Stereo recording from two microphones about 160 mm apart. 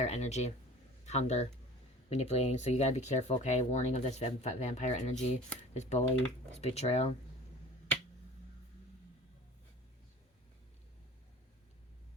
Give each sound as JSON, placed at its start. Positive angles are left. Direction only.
{"t": 0.0, "sound": "speech", "side_deg": 45}